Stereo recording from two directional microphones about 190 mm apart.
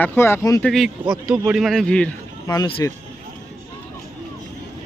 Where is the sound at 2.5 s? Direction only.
20° left (ahead or behind).